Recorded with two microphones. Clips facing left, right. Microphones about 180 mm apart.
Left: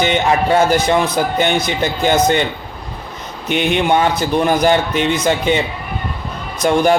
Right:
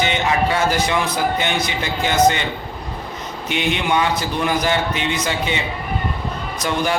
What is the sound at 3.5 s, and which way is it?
A man's voice, 45° left (ahead or behind).